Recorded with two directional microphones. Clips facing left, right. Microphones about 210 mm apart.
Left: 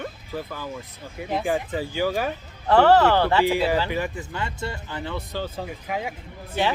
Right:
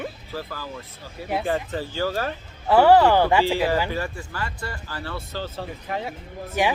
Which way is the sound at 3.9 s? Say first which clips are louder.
Left 2 dB; 20° left (ahead or behind).